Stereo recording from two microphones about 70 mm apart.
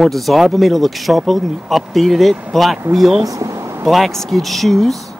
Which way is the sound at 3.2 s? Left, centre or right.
Right.